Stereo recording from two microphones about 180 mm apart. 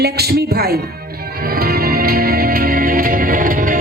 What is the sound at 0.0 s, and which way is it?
Speech, 60° right (ahead or behind).